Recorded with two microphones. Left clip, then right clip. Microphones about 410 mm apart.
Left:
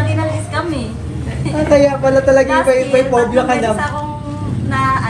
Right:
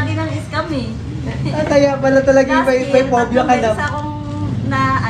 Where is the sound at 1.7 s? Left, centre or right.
Right.